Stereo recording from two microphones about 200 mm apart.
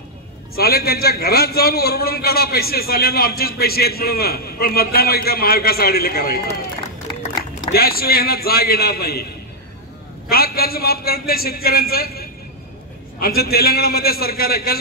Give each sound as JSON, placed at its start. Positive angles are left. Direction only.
{"t": 0.6, "sound": "a man's voice", "side_deg": 50}
{"t": 7.7, "sound": "a man's voice", "side_deg": 50}
{"t": 10.3, "sound": "a man's voice", "side_deg": 50}